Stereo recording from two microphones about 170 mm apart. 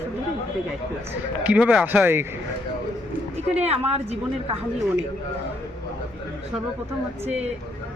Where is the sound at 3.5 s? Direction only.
35° right (ahead or behind).